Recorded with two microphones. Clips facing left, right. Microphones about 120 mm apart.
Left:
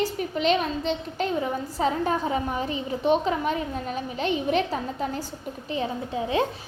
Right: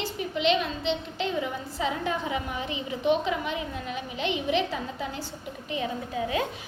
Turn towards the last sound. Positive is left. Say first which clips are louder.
# left 3 dB
turn(degrees=30)  # may be behind; listen again after turning